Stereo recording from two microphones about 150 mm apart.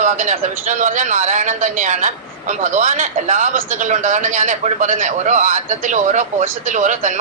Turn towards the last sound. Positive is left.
turn(degrees=-55)  # may be behind; listen again after turning